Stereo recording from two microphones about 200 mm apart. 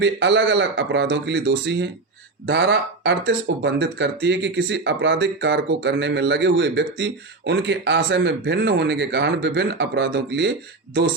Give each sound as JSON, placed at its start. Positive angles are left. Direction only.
{"t": 0.0, "sound": "speech", "side_deg": -60}